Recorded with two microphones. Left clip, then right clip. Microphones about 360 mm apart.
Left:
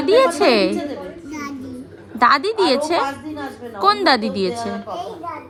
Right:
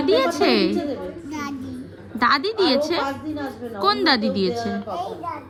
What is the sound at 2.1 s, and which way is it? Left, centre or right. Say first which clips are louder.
A woman's voice: left 4 dB; centre.